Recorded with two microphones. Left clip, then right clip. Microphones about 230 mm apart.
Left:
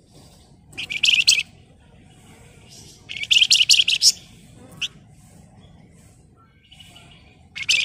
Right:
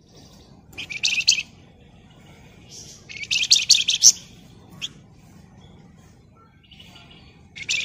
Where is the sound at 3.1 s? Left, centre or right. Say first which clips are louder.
Left 4 dB; left.